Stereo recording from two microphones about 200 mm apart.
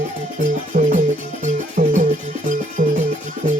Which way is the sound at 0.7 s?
40° right (ahead or behind).